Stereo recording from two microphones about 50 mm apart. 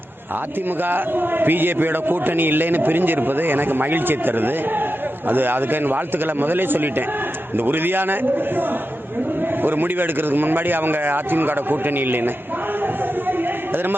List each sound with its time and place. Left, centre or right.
0.9 s a man's voice: right
9.6 s a man's voice: right